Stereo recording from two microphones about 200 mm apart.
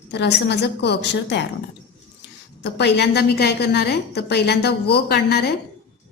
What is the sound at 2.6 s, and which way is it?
A woman's voice, 60° left (ahead or behind).